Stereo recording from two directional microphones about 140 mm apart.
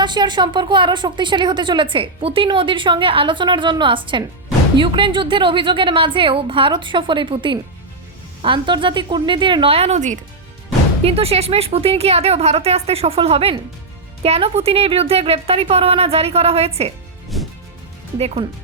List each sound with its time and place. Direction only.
0.0 s speech: 30° right (ahead or behind); by 10.2 s 55° right (ahead or behind)
11.0 s a woman's voice: 45° right (ahead or behind)
17.3 s music: centre (ahead or behind)